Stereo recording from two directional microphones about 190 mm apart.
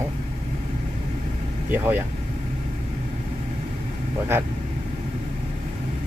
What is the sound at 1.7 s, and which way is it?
Speech, 10° right (ahead or behind).